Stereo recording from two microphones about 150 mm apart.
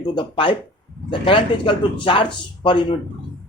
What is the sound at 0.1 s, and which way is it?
Speech, 30° left (ahead or behind).